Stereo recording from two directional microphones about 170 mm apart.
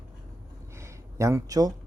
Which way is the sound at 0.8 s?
15° right (ahead or behind).